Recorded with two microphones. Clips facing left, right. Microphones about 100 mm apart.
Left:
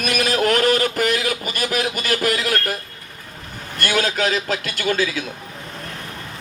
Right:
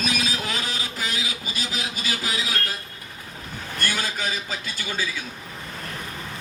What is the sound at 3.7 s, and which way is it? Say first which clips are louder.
A man's voice: left 8 dB; 75° left (ahead or behind).